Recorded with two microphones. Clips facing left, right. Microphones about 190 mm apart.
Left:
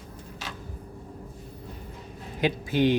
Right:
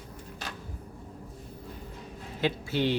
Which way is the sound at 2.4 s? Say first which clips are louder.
Left 4 dB; 15° left (ahead or behind).